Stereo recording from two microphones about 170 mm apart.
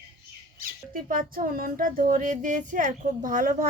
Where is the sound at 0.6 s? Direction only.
55° right (ahead or behind).